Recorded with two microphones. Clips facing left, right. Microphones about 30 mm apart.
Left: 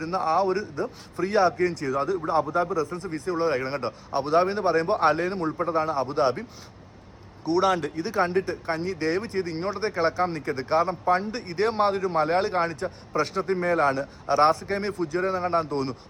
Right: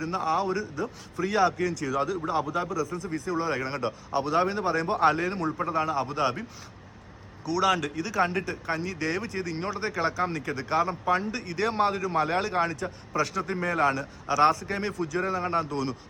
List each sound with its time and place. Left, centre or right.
0.0 s a man's voice: left
7.4 s a man's voice: left